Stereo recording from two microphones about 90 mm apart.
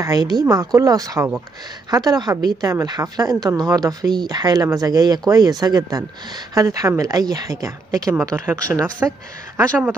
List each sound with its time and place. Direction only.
0.0 s speech: 45° right (ahead or behind)